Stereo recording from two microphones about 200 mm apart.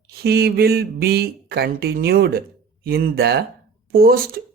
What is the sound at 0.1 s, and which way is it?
Speech, 50° right (ahead or behind).